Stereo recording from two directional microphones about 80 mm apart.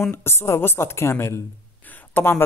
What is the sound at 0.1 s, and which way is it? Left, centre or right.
A woman's voice, left.